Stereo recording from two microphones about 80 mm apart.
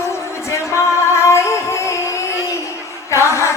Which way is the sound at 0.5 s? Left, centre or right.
Left.